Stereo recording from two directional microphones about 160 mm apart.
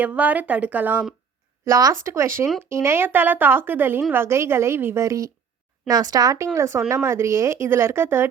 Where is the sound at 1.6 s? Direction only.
20° right (ahead or behind).